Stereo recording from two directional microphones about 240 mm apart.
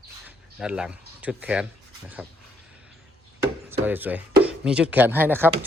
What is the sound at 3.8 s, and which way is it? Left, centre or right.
Speech, centre.